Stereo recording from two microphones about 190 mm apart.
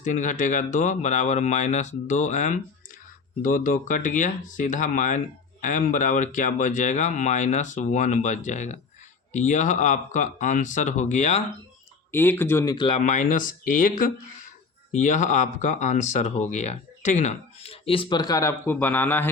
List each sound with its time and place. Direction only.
0.0 s speech: 40° left (ahead or behind)
12.1 s speech: 10° left (ahead or behind)
13.0 s speech: 40° left (ahead or behind); by 19.3 s 10° left (ahead or behind)